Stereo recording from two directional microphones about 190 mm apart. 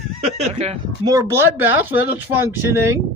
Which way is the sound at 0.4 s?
35° right (ahead or behind).